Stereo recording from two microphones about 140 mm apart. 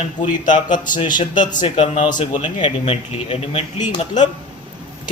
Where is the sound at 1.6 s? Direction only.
45° left (ahead or behind).